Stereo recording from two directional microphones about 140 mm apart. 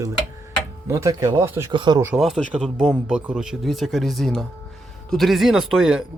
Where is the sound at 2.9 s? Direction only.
10° right (ahead or behind).